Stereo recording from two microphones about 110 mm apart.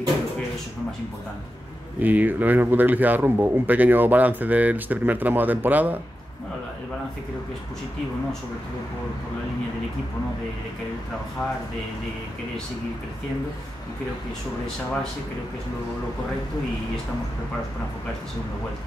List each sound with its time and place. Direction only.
2.0 s speech: 15° right (ahead or behind)